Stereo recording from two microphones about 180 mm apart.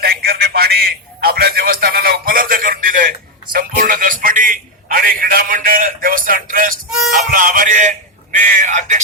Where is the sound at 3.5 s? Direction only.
55° right (ahead or behind).